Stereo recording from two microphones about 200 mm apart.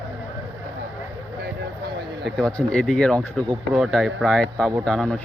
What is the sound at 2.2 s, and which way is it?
A man's voice, 5° left (ahead or behind).